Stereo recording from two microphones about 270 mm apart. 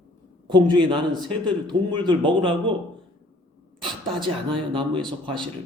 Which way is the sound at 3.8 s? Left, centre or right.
Centre.